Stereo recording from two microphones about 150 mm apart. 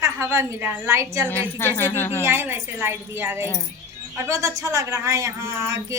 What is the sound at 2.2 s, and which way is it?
A woman's voice, 15° right (ahead or behind).